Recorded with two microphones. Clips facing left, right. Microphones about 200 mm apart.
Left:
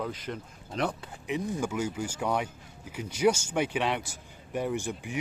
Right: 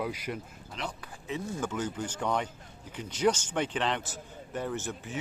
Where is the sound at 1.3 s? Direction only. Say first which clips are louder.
Left 3 dB; 15° left (ahead or behind).